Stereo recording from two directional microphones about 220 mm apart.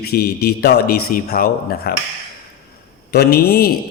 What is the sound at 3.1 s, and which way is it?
Speech, 45° left (ahead or behind).